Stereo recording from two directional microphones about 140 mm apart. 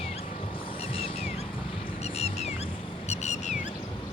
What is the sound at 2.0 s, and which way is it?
Music, 50° left (ahead or behind).